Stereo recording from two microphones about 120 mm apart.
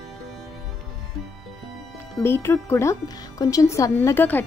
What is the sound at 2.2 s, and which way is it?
A woman's voice, 20° left (ahead or behind).